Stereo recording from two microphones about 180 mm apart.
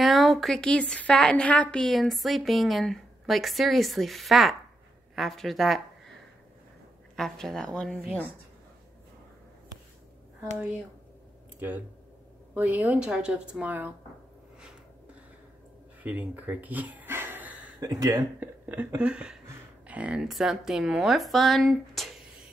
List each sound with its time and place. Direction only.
0.0 s a woman's voice: centre (ahead or behind)
7.2 s a woman's voice: 5° left (ahead or behind)
12.5 s a woman's voice: 10° right (ahead or behind)
16.0 s a sound: 10° right (ahead or behind)
17.7 s speech: 20° right (ahead or behind)
18.4 s speech: 10° right (ahead or behind)